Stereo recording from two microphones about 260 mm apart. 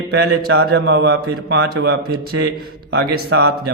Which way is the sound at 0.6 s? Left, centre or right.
Right.